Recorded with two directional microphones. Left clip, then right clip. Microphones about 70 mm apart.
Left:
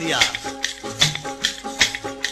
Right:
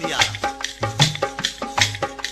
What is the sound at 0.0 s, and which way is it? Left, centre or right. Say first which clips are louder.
Music: even; right.